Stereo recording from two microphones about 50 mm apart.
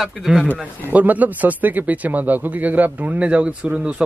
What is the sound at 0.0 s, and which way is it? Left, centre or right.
Speech, centre.